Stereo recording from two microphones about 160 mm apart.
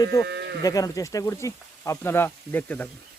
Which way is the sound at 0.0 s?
20° left (ahead or behind).